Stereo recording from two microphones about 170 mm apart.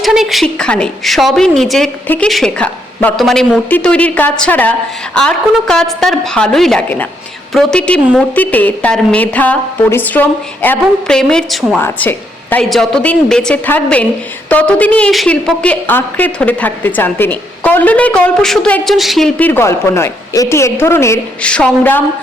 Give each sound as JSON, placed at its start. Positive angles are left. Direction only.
{"t": 0.0, "sound": "a woman's voice", "side_deg": 0}